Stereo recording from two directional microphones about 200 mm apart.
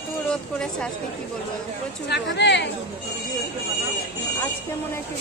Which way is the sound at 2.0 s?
60° left (ahead or behind).